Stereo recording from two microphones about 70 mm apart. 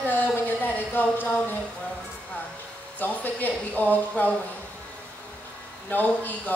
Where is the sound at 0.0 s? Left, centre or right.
Left.